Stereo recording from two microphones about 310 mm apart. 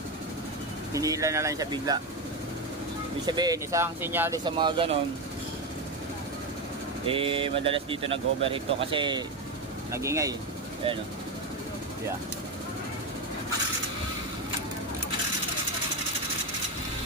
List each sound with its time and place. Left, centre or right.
0.9 s speech: centre
3.2 s speech: centre
7.0 s speech: centre